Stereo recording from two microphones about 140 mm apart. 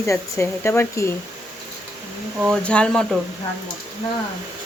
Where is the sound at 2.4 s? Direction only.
5° left (ahead or behind).